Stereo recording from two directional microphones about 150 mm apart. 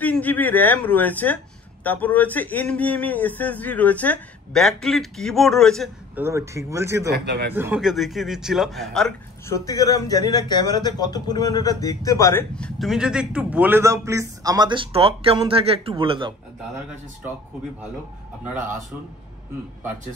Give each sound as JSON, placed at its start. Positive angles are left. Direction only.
{"t": 0.0, "sound": "a man's voice", "side_deg": 10}
{"t": 6.1, "sound": "a man's voice", "side_deg": -20}
{"t": 7.1, "sound": "speech", "side_deg": -90}
{"t": 7.5, "sound": "speech", "side_deg": -15}
{"t": 7.8, "sound": "a man's voice", "side_deg": 0}
{"t": 9.5, "sound": "a man's voice", "side_deg": 25}
{"t": 12.5, "sound": "a man's voice", "side_deg": 5}